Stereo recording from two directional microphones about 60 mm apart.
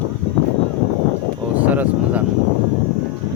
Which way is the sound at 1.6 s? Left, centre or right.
Right.